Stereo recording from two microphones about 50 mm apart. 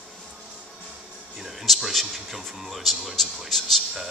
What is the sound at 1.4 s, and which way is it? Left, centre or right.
Speech, centre.